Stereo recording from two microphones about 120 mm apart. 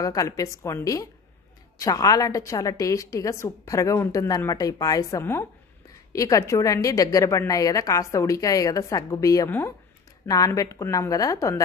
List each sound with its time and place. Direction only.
0.0 s a woman's voice: 30° left (ahead or behind)